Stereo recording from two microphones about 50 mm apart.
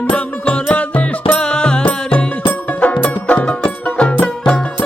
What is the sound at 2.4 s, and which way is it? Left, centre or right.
Music, left.